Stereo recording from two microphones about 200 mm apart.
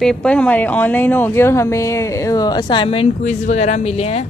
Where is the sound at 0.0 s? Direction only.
5° left (ahead or behind).